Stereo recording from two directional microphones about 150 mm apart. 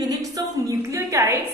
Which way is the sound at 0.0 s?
25° right (ahead or behind).